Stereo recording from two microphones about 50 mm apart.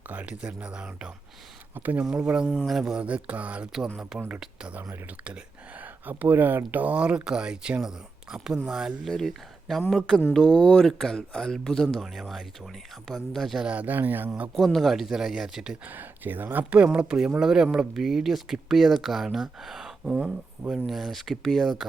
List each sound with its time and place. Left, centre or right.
0.1 s speech: right
1.7 s speech: right
2.1 s speech: right
3.0 s speech: right
4.1 s speech: centre
5.8 s speech: right; by 9.0 s centre
9.0 s speech: centre
10.3 s speech: centre
12.0 s speech: centre
13.7 s speech: right
14.6 s speech: centre
15.9 s speech: right
16.6 s speech: right; by 21.8 s centre